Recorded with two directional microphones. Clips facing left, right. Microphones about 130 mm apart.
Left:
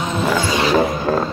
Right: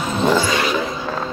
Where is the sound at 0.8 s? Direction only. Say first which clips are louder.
Left 6 dB; 50° left (ahead or behind).